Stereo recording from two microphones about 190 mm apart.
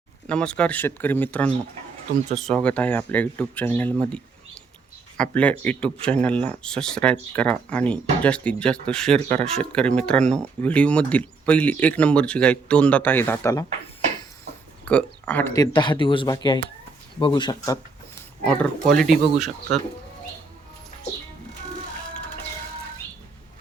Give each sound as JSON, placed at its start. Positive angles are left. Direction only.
{"t": 0.3, "sound": "speech", "side_deg": 5}
{"t": 14.8, "sound": "speech", "side_deg": 5}
{"t": 15.5, "sound": "speech", "side_deg": 20}
{"t": 18.4, "sound": "speech", "side_deg": 5}